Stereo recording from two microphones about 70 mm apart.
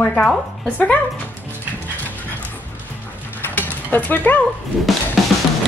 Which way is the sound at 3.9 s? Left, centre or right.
Left.